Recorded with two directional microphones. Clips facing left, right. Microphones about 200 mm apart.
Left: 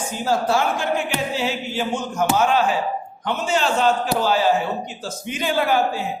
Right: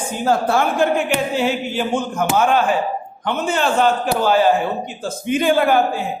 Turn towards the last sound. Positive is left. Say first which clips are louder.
# right 4 dB
turn(degrees=-55)  # may be behind; listen again after turning